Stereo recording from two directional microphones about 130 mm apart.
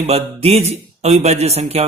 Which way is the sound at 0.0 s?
50° right (ahead or behind).